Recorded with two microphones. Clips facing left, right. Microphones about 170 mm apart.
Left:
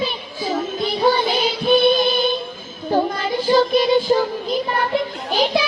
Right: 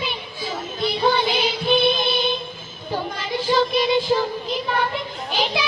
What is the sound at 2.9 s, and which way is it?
Child singing, 45° left (ahead or behind).